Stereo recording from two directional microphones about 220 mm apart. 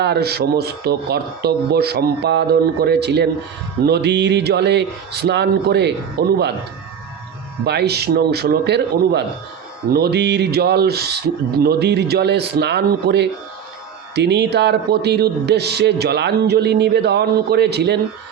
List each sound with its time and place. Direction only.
0.0 s speech: 50° right (ahead or behind)
7.6 s speech: 50° right (ahead or behind)